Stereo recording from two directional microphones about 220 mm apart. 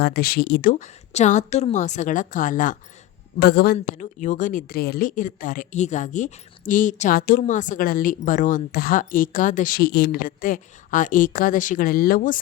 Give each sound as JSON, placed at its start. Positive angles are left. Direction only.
{"t": 0.0, "sound": "speech", "side_deg": 45}
{"t": 3.8, "sound": "speech", "side_deg": 35}